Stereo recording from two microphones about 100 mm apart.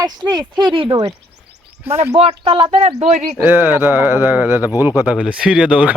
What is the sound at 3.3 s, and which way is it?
Speech, 20° right (ahead or behind).